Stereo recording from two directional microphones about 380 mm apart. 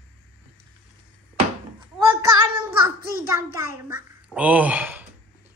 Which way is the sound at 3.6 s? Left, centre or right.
Centre.